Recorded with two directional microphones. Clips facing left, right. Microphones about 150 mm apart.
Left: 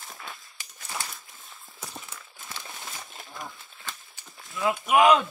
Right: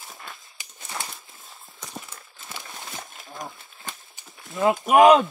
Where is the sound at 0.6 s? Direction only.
20° right (ahead or behind).